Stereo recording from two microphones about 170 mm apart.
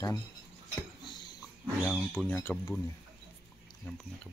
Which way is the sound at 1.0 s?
25° left (ahead or behind).